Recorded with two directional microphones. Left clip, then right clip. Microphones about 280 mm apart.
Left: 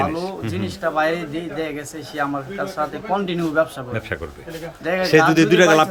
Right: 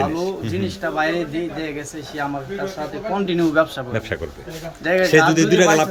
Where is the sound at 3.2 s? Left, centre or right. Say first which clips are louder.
Right 6 dB; centre.